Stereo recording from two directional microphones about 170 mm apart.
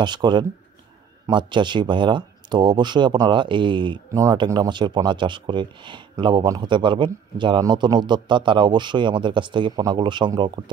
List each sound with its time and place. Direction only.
0.0 s speech: 25° right (ahead or behind)